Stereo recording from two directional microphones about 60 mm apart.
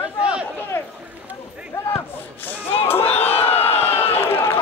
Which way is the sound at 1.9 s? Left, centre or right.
Left.